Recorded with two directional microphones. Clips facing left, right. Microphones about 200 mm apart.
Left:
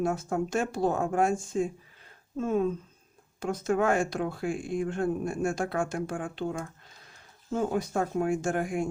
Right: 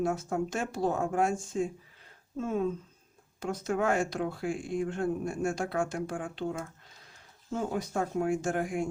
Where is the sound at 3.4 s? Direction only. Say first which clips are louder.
Left 3 dB; 50° left (ahead or behind).